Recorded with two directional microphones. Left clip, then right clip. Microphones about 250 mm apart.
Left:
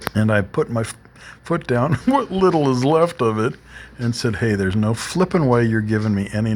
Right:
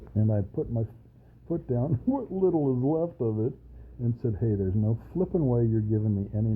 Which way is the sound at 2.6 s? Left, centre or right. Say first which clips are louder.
Left 9 dB; left.